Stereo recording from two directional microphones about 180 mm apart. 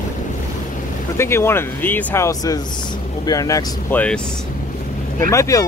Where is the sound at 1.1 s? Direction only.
15° left (ahead or behind).